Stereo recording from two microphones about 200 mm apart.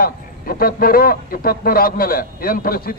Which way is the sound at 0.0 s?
45° left (ahead or behind).